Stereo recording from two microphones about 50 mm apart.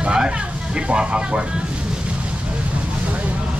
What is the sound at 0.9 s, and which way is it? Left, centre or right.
Speech, centre.